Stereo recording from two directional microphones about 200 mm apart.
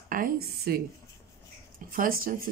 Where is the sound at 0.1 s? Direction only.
45° right (ahead or behind).